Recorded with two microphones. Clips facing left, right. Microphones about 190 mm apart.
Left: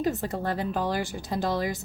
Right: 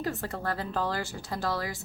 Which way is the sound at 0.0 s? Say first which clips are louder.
Left 5 dB; 20° left (ahead or behind).